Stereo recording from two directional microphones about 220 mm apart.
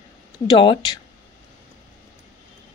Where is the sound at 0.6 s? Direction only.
25° left (ahead or behind).